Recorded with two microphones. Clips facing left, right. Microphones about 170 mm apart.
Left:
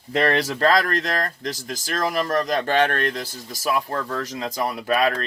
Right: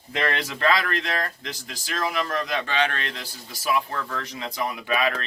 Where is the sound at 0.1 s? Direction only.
40° left (ahead or behind).